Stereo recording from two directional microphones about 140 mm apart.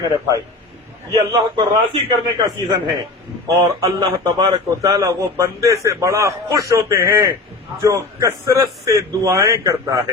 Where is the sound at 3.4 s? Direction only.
25° right (ahead or behind).